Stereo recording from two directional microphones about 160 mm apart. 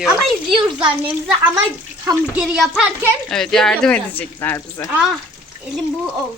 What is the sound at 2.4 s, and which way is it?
Speech, 5° right (ahead or behind).